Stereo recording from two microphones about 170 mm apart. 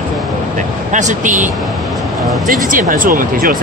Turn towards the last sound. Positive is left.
turn(degrees=-55)  # may be behind; listen again after turning